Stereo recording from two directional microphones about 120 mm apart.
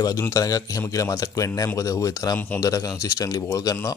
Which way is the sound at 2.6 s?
30° left (ahead or behind).